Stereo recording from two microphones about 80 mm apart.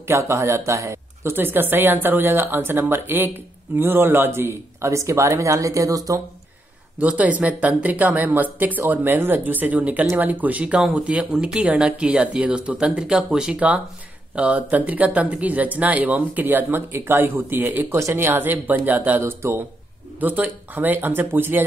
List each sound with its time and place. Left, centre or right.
0.0 s speech: right
7.0 s speech: centre